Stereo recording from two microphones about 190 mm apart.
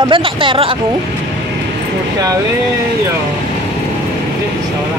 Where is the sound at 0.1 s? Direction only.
25° right (ahead or behind).